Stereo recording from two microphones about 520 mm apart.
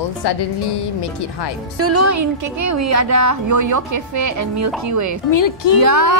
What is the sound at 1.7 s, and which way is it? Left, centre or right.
A woman's voice, right.